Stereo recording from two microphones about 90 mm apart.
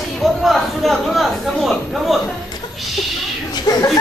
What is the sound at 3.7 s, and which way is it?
Speech, 45° left (ahead or behind).